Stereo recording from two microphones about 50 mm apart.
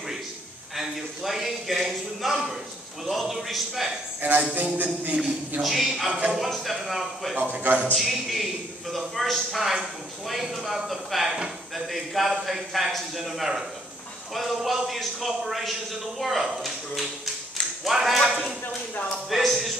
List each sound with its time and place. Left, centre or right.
0.7 s a man's voice: centre
4.2 s speech: right
5.6 s a man's voice: centre